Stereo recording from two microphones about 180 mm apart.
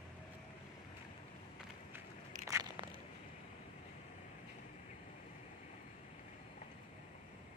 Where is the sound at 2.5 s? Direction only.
20° right (ahead or behind).